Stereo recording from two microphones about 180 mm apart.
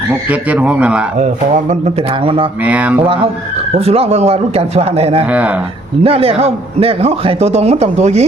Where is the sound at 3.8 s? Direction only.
35° right (ahead or behind).